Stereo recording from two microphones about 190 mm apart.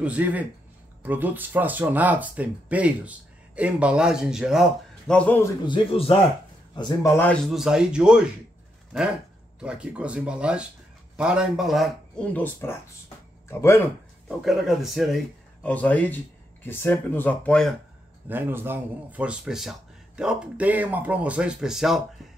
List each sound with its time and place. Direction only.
0.0 s speech: 5° right (ahead or behind)
5.7 s speech: 25° left (ahead or behind)
7.4 s speech: 5° right (ahead or behind)
9.6 s speech: 5° right (ahead or behind); by 13.8 s 10° left (ahead or behind)
14.4 s speech: centre (ahead or behind)
18.3 s speech: 10° right (ahead or behind)